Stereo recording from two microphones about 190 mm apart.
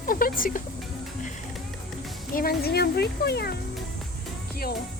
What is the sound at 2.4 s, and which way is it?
Speech, 55° left (ahead or behind).